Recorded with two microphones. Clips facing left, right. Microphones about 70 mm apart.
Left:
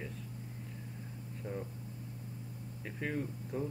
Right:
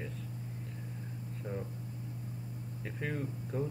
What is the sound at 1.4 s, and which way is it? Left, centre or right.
Speech, centre.